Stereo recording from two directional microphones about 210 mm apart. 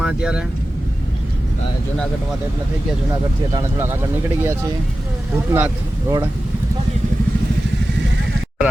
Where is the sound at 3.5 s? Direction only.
10° right (ahead or behind).